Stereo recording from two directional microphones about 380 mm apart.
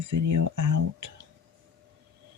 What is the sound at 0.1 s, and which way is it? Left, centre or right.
Speech, right.